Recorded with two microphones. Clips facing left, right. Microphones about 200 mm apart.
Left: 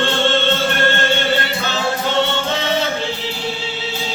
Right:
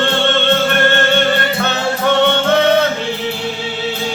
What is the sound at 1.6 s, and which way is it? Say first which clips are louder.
Music: right 6 dB; 60° right (ahead or behind).